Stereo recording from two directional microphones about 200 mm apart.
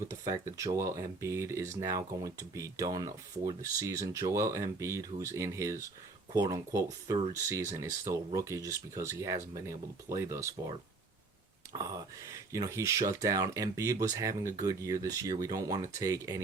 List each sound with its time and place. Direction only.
0.1 s speech: 15° right (ahead or behind)